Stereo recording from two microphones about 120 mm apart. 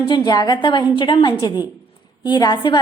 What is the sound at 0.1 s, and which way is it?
A woman's voice, 35° left (ahead or behind).